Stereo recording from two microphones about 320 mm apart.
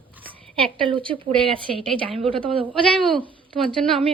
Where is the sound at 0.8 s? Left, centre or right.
Centre.